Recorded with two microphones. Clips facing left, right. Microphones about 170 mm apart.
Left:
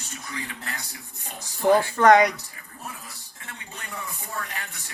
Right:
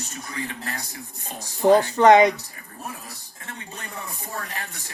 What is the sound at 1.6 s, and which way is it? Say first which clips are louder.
Speech: right 3 dB; 20° right (ahead or behind).